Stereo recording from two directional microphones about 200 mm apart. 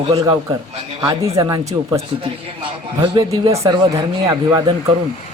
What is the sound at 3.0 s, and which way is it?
A woman's voice, 20° right (ahead or behind).